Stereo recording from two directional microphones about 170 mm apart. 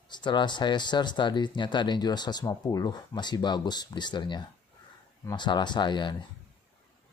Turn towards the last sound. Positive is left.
turn(degrees=25)  # may be behind; listen again after turning